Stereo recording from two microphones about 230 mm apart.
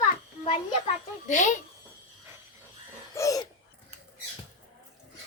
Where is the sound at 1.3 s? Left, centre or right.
Left.